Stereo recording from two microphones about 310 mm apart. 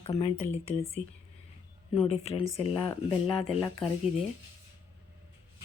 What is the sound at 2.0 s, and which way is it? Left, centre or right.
Speech, centre.